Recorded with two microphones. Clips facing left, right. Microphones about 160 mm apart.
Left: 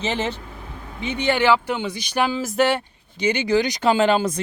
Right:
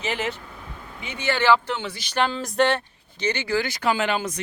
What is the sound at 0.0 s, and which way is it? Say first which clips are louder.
A man's voice: left 3 dB; 25° left (ahead or behind).